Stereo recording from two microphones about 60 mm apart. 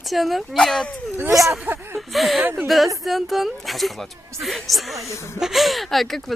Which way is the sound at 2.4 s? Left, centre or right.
Right.